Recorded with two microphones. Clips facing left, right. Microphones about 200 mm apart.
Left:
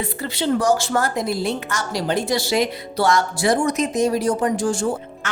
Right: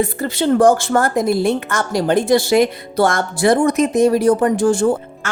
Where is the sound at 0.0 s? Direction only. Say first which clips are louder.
Right 6 dB; 45° right (ahead or behind).